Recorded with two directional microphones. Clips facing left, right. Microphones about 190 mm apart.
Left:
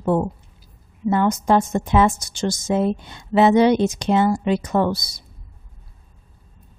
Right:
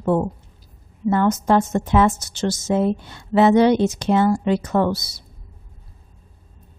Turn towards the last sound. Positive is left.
turn(degrees=15)  # may be behind; listen again after turning